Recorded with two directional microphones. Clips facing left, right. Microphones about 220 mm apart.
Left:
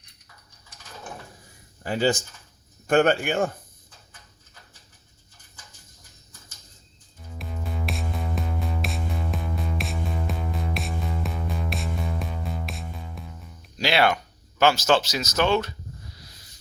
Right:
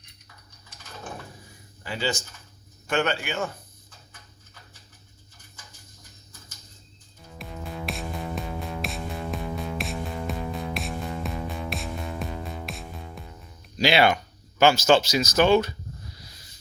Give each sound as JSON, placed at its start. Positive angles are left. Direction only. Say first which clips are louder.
{"t": 1.8, "sound": "a man's voice", "louder": "left 6 dB", "side_deg": 45}
{"t": 7.3, "sound": "music", "louder": "left 1 dB", "side_deg": 0}
{"t": 13.7, "sound": "speech", "louder": "right 2 dB", "side_deg": 0}